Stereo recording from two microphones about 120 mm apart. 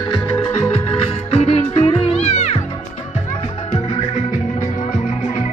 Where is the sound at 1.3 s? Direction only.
60° left (ahead or behind).